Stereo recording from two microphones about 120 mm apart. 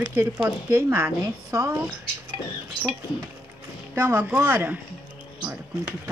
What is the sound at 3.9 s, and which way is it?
Speech, 15° right (ahead or behind).